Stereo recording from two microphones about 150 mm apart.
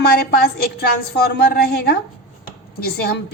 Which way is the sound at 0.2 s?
90° left.